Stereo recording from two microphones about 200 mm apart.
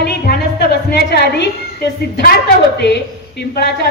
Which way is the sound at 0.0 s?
55° left (ahead or behind).